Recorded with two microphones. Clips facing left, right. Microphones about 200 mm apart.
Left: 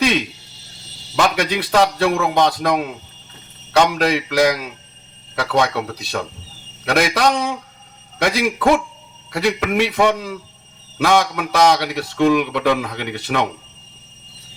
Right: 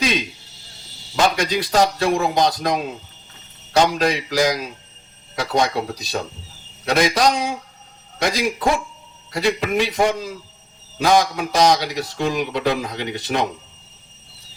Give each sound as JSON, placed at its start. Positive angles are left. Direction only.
{"t": 1.4, "sound": "a man's voice", "side_deg": 60}